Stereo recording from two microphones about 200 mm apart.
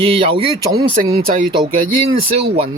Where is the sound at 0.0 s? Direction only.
30° right (ahead or behind).